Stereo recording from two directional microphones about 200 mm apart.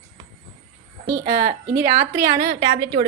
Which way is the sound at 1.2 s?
35° right (ahead or behind).